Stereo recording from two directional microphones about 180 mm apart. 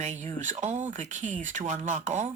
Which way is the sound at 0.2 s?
40° right (ahead or behind).